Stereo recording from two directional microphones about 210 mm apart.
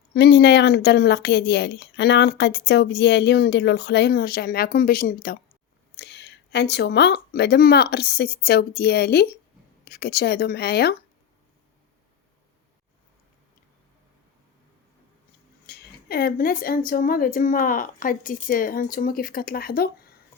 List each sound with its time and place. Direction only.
0.1 s speech: 50° left (ahead or behind)
15.6 s speech: 50° left (ahead or behind)